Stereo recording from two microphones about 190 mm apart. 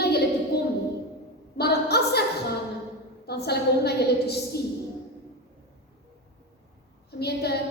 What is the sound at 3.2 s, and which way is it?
A woman's voice, 60° left (ahead or behind).